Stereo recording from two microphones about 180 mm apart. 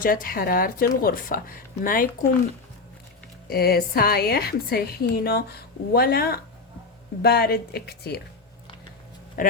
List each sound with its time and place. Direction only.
0.0 s speech: 50° left (ahead or behind)
3.5 s a woman's voice: 60° left (ahead or behind)
9.4 s a sound: 50° left (ahead or behind)